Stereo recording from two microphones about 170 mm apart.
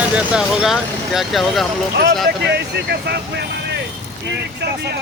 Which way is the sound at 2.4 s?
80° right.